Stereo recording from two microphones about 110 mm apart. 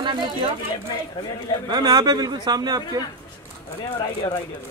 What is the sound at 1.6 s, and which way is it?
A man's voice, 40° right (ahead or behind).